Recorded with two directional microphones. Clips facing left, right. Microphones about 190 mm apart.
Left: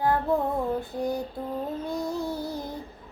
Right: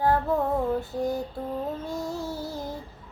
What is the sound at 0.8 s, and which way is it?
Female singing, 15° left (ahead or behind).